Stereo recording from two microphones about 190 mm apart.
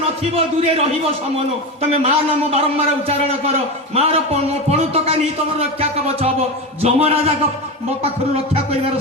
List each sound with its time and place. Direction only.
0.3 s a man's voice: 30° right (ahead or behind)
1.9 s a man's voice: 30° right (ahead or behind)